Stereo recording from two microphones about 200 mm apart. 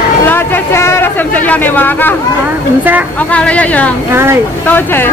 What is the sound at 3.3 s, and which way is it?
Speech, 5° left (ahead or behind).